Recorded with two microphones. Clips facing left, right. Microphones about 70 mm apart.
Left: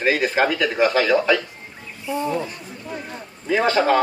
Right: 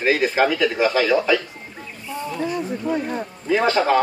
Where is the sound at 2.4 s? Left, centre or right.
Right.